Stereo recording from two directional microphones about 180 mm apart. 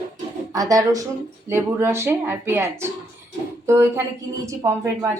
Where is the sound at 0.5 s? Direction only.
20° right (ahead or behind).